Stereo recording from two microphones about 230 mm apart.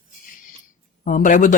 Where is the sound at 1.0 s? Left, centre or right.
Left.